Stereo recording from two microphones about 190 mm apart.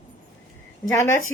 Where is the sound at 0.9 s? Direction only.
15° left (ahead or behind).